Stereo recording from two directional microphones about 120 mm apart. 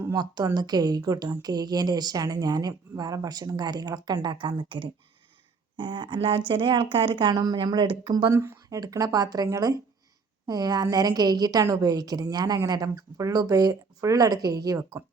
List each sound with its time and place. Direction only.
0.0 s a woman's voice: 35° right (ahead or behind)
8.3 s a woman's voice: 25° right (ahead or behind)